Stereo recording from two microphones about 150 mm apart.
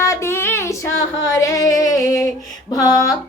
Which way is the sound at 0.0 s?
20° left (ahead or behind).